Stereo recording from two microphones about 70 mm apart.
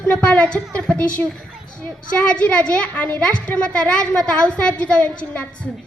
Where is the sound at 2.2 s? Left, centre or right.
Centre.